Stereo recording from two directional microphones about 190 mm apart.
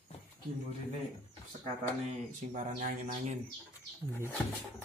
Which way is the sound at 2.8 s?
45° right (ahead or behind).